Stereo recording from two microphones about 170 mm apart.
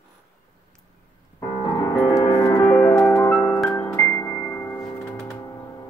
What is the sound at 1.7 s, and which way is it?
Music, 20° left (ahead or behind).